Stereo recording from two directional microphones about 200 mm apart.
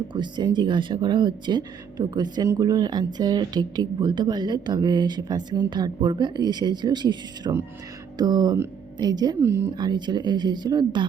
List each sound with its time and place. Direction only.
0.1 s speech: 20° right (ahead or behind)